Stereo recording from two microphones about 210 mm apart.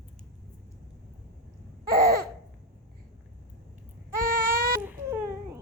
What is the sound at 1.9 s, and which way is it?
Laughter, 45° right (ahead or behind).